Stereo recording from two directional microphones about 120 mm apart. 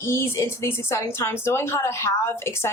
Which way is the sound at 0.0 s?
20° left (ahead or behind).